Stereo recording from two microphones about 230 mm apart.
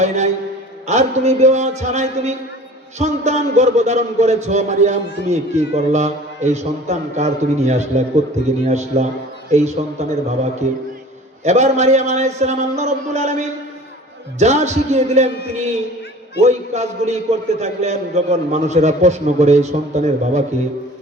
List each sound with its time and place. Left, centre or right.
0.9 s a man's voice: right